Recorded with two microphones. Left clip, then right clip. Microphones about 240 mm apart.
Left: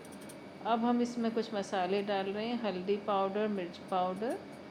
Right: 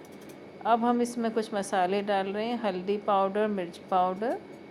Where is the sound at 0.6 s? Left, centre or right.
Right.